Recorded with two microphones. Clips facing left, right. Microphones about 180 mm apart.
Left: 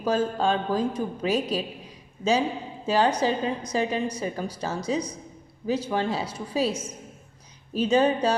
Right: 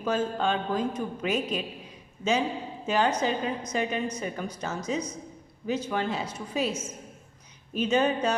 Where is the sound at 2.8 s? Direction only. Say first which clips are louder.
Left 3 dB; 35° left (ahead or behind).